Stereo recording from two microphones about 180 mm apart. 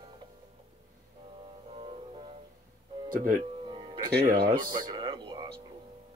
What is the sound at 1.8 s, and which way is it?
Music, 30° right (ahead or behind).